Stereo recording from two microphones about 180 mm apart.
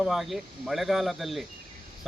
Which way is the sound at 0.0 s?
Centre (ahead or behind).